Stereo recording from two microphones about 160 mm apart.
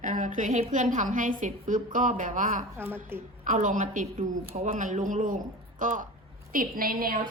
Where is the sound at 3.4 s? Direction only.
55° right (ahead or behind).